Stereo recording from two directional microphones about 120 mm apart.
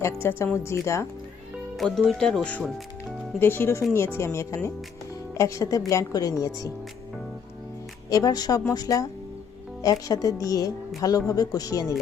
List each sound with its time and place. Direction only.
0.0 s a woman's voice: 20° left (ahead or behind)
1.7 s a woman's voice: centre (ahead or behind); by 6.7 s 30° left (ahead or behind)
8.1 s a woman's voice: 30° left (ahead or behind)